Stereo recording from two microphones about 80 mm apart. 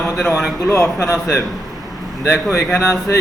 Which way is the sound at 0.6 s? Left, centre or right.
Left.